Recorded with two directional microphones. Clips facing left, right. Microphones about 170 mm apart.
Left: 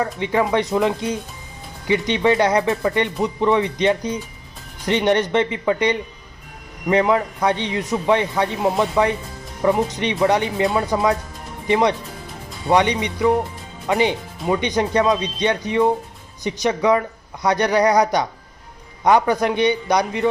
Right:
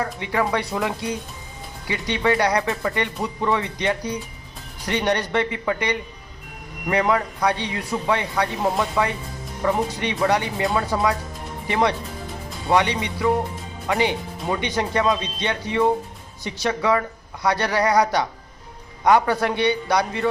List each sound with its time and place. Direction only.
0.0 s speech: 20° left (ahead or behind)